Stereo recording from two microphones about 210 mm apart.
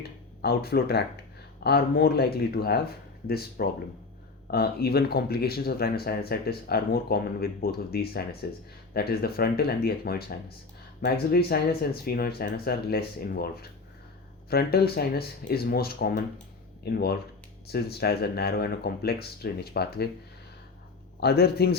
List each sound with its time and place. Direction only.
0.4 s speech: 50° left (ahead or behind)
21.2 s speech: 50° left (ahead or behind)